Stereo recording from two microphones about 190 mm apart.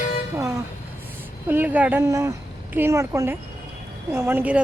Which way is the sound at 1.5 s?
10° right (ahead or behind).